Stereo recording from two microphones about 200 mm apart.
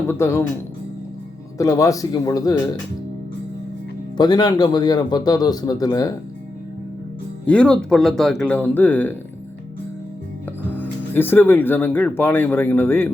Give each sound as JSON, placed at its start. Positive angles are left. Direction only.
{"t": 0.1, "sound": "speech", "side_deg": 15}
{"t": 1.5, "sound": "speech", "side_deg": 15}
{"t": 4.2, "sound": "a man's voice", "side_deg": 20}
{"t": 7.4, "sound": "speech", "side_deg": 5}
{"t": 10.7, "sound": "speech", "side_deg": 10}